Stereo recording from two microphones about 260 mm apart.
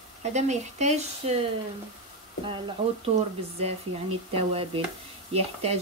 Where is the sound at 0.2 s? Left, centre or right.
Right.